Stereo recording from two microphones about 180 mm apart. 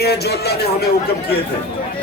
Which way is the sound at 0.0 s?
65° left (ahead or behind).